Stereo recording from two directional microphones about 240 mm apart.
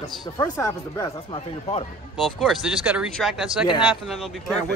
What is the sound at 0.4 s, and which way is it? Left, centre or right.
Speech, centre.